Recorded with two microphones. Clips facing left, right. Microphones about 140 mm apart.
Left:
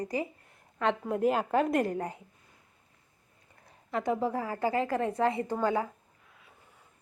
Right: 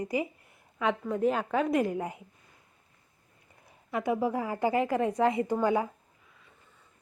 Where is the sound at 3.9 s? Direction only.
10° right (ahead or behind).